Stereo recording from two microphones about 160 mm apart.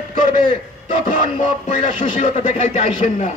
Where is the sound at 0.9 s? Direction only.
45° left (ahead or behind).